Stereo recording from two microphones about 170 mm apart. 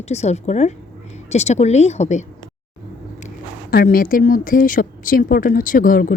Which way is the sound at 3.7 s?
60° left (ahead or behind).